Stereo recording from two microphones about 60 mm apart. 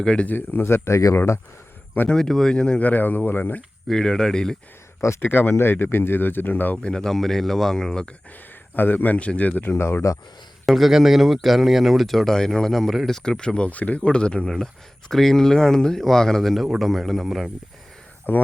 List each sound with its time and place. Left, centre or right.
0.0 s speech: centre
0.3 s speech: left
2.0 s speech: centre
2.8 s speech: left
3.8 s speech: centre
4.9 s speech: left
5.3 s speech: left
6.8 s speech: centre
8.7 s speech: left
10.7 s speech: centre
15.1 s speech: centre
18.3 s speech: left